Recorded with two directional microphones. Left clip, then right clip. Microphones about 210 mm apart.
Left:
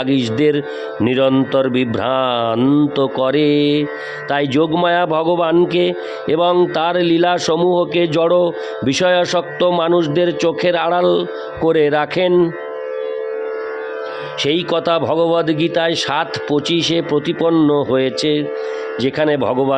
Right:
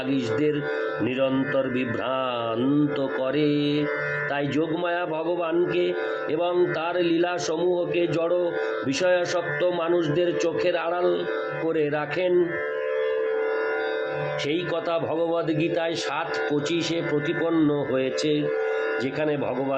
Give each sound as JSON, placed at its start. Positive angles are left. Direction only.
{"t": 0.1, "sound": "speech", "side_deg": 55}
{"t": 14.4, "sound": "speech", "side_deg": 55}